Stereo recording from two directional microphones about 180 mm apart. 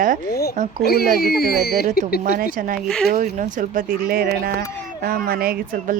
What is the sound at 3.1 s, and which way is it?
Speech, 45° right (ahead or behind).